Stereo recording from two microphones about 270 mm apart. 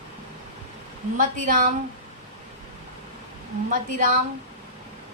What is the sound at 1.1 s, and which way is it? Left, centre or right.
Speech, right.